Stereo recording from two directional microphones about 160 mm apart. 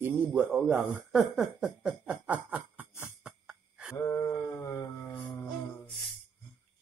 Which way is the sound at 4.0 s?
20° left (ahead or behind).